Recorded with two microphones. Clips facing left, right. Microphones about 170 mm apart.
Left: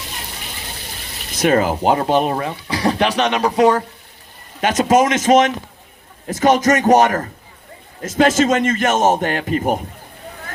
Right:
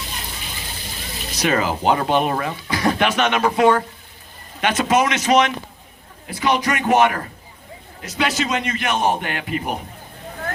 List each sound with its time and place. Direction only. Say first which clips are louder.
1.4 s a man's voice: left 5 dB; 50° left (ahead or behind)